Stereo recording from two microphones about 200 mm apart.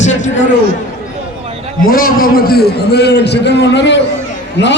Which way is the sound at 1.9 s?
45° left (ahead or behind).